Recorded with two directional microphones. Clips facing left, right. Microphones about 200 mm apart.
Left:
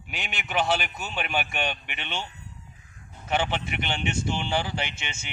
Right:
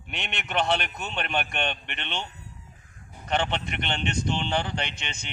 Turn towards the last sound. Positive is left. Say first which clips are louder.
# even
turn(degrees=5)  # may be behind; listen again after turning